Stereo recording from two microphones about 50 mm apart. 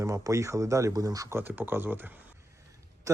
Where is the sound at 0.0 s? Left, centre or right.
Right.